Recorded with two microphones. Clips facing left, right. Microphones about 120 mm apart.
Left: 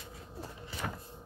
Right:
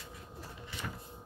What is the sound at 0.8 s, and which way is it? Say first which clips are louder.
Printer: left 4 dB; 65° left (ahead or behind).